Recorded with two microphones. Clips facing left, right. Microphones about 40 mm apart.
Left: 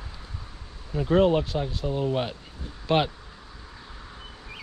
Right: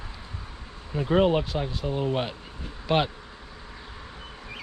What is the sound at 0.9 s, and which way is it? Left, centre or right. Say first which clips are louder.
Speech: left 1 dB; centre.